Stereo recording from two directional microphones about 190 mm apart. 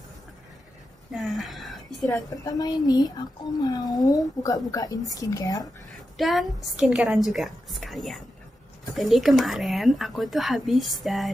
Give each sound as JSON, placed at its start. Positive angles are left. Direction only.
{"t": 1.1, "sound": "a sound", "side_deg": 0}
{"t": 2.4, "sound": "a woman's voice", "side_deg": 20}
{"t": 6.1, "sound": "speech", "side_deg": 0}